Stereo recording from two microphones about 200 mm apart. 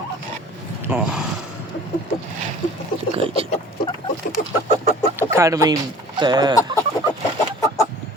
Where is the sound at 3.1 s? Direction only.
30° right (ahead or behind).